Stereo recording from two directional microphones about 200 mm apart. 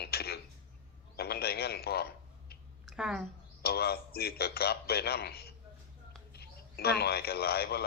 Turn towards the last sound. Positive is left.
turn(degrees=50)  # may be behind; listen again after turning